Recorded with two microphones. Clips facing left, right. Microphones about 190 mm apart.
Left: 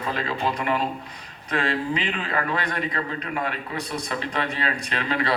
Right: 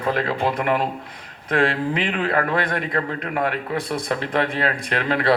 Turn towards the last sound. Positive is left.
turn(degrees=-55)  # may be behind; listen again after turning